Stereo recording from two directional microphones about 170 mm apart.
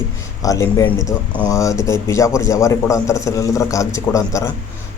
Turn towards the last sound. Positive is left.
turn(degrees=20)  # may be behind; listen again after turning